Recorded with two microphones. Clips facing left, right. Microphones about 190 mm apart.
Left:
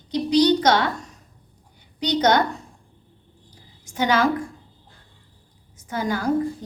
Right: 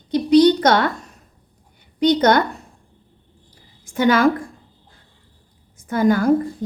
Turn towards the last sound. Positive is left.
turn(degrees=-55)  # may be behind; listen again after turning